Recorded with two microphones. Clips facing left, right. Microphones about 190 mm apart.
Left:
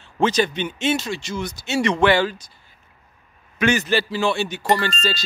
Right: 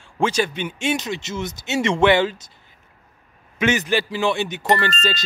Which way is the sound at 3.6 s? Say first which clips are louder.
Even; 20° right (ahead or behind).